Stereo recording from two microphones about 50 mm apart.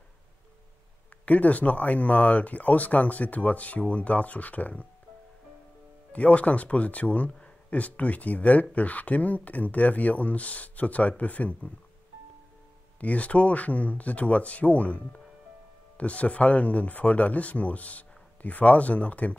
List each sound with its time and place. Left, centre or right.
1.2 s speech: left
6.1 s speech: left
7.2 s a sound: centre
7.7 s speech: left
13.0 s speech: left